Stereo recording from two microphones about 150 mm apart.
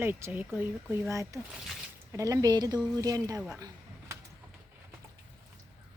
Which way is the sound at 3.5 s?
20° right (ahead or behind).